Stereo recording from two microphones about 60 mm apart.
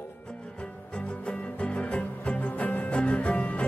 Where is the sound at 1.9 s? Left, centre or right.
Left.